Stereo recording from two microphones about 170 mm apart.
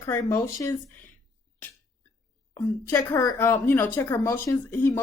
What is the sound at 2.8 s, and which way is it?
Speech, 15° left (ahead or behind).